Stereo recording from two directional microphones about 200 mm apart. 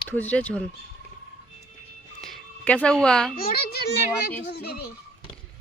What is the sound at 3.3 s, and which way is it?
Speech, 50° left (ahead or behind).